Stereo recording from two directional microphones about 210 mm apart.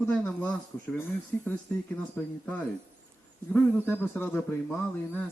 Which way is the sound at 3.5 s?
10° left (ahead or behind).